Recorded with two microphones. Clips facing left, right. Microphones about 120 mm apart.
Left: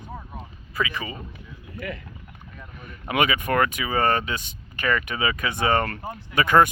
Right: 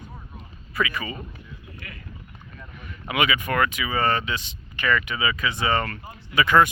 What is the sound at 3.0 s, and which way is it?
Speech, 45° left (ahead or behind).